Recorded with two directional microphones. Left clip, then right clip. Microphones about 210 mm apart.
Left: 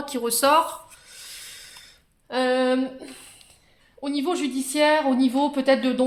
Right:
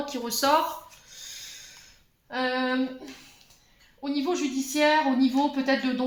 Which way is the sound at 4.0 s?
55° left (ahead or behind).